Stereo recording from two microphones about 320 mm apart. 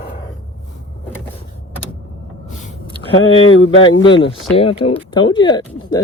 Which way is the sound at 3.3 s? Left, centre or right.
Left.